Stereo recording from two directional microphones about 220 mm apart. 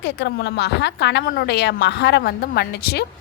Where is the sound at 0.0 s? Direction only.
50° left (ahead or behind).